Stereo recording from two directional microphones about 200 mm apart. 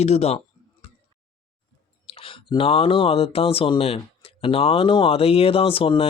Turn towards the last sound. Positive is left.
turn(degrees=30)  # may be behind; listen again after turning